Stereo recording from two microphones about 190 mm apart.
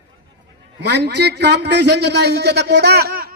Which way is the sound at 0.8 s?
65° right (ahead or behind).